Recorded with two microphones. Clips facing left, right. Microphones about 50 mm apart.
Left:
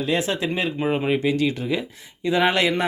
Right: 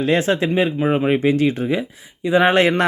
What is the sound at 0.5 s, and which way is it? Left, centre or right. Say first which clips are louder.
Speech: right 5 dB; centre.